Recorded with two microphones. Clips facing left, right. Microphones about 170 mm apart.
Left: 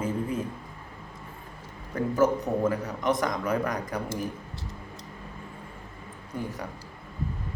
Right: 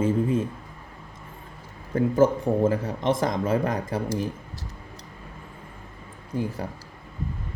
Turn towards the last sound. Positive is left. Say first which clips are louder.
# right 5 dB
turn(degrees=-30)  # may be behind; listen again after turning